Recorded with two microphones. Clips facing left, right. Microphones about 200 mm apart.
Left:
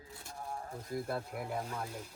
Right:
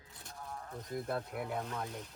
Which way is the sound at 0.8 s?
Centre (ahead or behind).